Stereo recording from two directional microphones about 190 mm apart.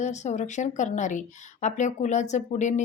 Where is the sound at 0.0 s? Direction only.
40° left (ahead or behind).